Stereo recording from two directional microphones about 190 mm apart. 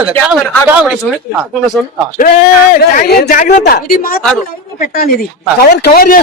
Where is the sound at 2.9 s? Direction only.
50° left (ahead or behind).